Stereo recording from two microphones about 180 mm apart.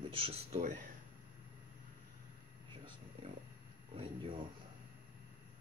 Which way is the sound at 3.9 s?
30° right (ahead or behind).